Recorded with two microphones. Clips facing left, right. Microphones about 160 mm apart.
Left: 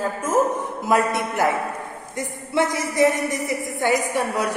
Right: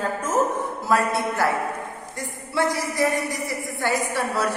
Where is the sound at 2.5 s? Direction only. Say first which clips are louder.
Left 3 dB; 20° left (ahead or behind).